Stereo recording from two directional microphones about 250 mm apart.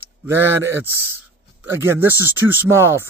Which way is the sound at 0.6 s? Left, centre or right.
Centre.